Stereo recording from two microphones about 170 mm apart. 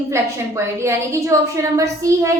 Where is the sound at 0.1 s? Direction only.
15° right (ahead or behind).